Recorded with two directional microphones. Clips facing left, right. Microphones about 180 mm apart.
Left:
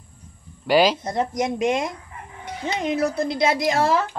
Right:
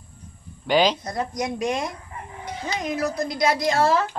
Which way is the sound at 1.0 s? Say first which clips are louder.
Left 4 dB; 25° left (ahead or behind).